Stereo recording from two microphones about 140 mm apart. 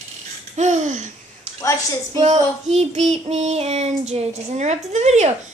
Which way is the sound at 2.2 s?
55° right (ahead or behind).